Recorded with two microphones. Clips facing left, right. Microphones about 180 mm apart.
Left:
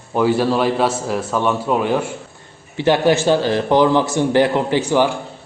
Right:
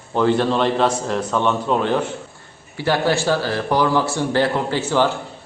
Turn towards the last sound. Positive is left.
turn(degrees=15)  # may be behind; listen again after turning